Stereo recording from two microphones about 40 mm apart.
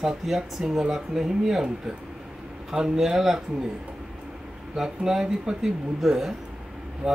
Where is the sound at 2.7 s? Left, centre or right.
Centre.